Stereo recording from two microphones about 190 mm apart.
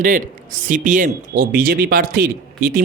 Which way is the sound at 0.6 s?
45° right (ahead or behind).